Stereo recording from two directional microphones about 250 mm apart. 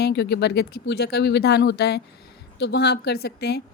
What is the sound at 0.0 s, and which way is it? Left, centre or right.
Speech, left.